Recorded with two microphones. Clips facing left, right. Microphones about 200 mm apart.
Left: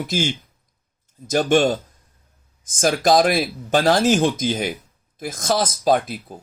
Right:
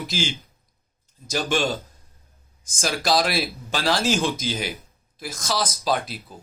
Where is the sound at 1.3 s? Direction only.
50° left (ahead or behind).